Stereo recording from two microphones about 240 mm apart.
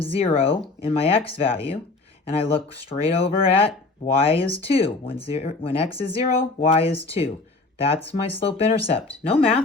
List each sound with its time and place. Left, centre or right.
0.0 s speech: left